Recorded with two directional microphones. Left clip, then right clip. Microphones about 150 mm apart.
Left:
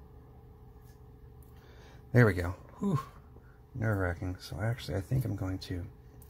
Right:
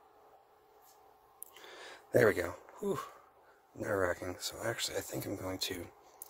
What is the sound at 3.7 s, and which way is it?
Speech, 40° right (ahead or behind).